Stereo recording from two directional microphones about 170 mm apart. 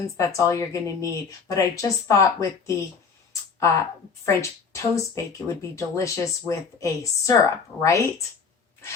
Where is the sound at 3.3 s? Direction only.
15° left (ahead or behind).